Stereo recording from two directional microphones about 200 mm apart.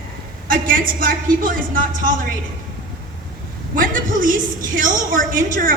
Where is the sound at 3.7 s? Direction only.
40° right (ahead or behind).